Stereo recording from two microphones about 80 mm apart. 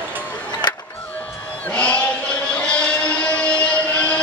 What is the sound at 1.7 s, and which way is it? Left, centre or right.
Sheep, centre.